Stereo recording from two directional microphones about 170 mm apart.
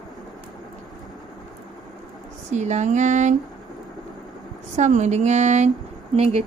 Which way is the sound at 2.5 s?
45° right (ahead or behind).